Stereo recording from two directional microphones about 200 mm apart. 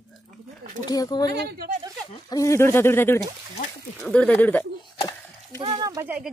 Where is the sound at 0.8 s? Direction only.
20° left (ahead or behind).